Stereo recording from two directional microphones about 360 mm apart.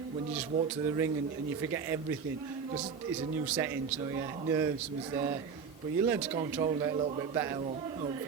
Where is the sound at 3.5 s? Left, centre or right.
Centre.